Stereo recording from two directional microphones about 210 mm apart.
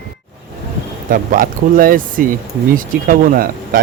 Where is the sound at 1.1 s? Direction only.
40° right (ahead or behind).